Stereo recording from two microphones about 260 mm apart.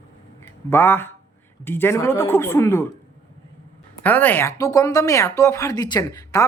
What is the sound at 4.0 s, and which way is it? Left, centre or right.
A woman's voice, centre.